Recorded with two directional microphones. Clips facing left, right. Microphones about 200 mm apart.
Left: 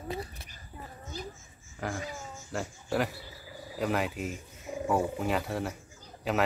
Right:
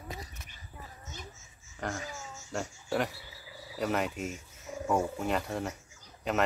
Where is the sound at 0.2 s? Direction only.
35° left (ahead or behind).